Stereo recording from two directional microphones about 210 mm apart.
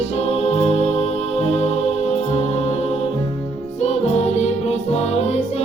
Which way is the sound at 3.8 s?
30° left (ahead or behind).